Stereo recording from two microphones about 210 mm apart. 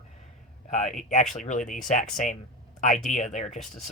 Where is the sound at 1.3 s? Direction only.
40° left (ahead or behind).